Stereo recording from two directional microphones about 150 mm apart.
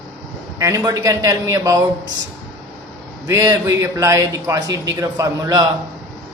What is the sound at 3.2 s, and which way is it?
A man's voice, 20° right (ahead or behind).